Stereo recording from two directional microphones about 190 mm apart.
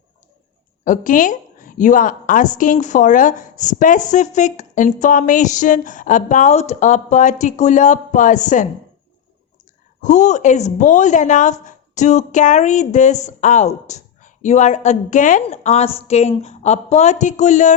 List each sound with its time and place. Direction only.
0.9 s a woman's voice: 45° left (ahead or behind)
10.0 s a woman's voice: 40° left (ahead or behind)